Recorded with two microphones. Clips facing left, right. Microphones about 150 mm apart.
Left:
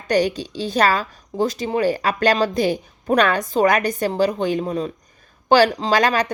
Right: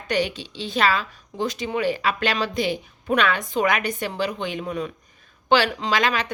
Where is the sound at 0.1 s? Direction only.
40° left (ahead or behind).